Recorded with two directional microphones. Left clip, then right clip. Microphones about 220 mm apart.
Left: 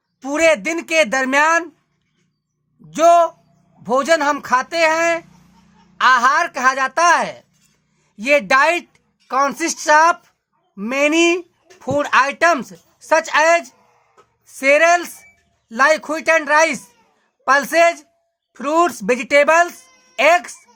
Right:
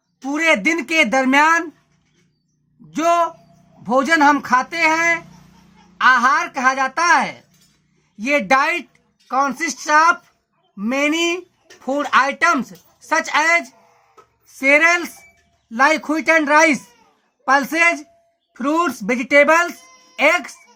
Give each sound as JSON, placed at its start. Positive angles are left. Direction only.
{"t": 0.3, "sound": "speech", "side_deg": 45}
{"t": 2.9, "sound": "speech", "side_deg": 40}
{"t": 14.4, "sound": "speech", "side_deg": 45}